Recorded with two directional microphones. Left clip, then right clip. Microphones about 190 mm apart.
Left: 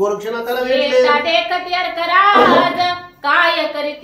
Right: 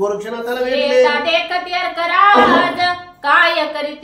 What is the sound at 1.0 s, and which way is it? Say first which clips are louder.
Child singing: left 1 dB; 15° right (ahead or behind).